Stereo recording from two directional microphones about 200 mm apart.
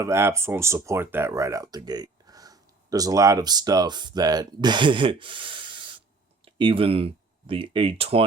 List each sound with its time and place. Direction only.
0.0 s speech: 15° right (ahead or behind); by 8.2 s 30° right (ahead or behind)